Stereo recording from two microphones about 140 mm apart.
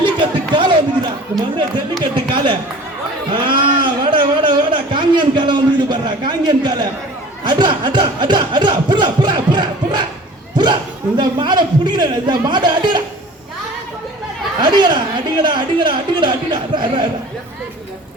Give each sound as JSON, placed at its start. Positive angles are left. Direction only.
{"t": 0.0, "sound": "chatter", "side_deg": -35}
{"t": 3.3, "sound": "a sound", "side_deg": -35}
{"t": 11.2, "sound": "speech", "side_deg": -30}
{"t": 14.6, "sound": "speech", "side_deg": -30}